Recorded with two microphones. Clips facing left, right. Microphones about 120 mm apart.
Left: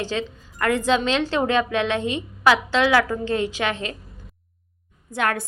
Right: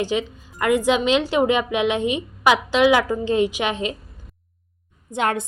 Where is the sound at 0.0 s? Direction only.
15° right (ahead or behind).